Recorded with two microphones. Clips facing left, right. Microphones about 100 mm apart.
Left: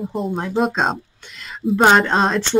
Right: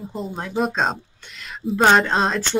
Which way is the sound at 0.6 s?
Centre (ahead or behind).